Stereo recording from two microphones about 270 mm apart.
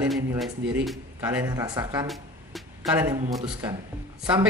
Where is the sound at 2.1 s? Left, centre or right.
Centre.